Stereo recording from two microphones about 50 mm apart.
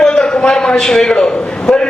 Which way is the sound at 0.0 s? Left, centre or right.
Centre.